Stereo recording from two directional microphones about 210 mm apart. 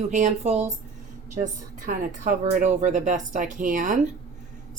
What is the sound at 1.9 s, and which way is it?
Speech, 35° right (ahead or behind).